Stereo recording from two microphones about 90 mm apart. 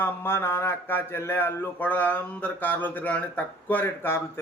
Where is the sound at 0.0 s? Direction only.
25° left (ahead or behind).